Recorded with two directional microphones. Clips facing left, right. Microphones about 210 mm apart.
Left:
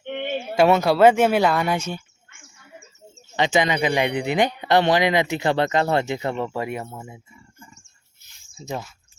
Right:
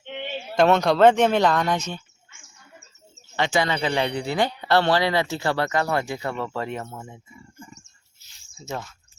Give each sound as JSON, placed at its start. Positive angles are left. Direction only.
{"t": 0.0, "sound": "a sound", "side_deg": 55}
{"t": 0.5, "sound": "speech", "side_deg": 10}
{"t": 3.3, "sound": "speech", "side_deg": 20}